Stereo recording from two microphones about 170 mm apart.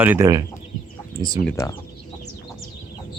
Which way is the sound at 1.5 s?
15° left (ahead or behind).